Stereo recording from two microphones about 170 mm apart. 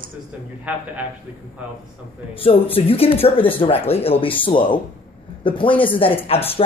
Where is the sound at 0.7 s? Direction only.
10° right (ahead or behind).